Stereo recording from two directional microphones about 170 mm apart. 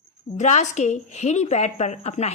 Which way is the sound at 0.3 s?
45° left (ahead or behind).